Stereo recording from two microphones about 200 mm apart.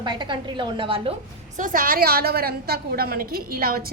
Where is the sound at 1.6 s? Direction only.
45° right (ahead or behind).